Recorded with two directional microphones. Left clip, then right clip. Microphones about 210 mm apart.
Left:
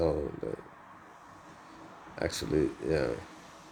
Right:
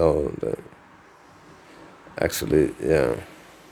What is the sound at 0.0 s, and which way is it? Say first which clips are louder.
Speech: right 10 dB; 35° right (ahead or behind).